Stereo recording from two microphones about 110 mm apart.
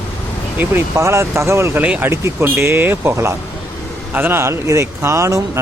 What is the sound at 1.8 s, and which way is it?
Speech, 10° right (ahead or behind).